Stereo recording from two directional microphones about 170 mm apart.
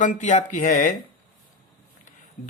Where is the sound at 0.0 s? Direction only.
45° left (ahead or behind).